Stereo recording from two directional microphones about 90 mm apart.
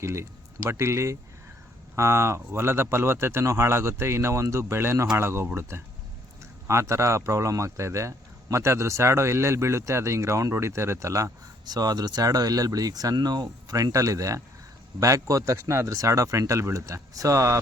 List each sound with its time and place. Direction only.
0.0 s speech: 30° right (ahead or behind)
11.7 s speech: 45° right (ahead or behind)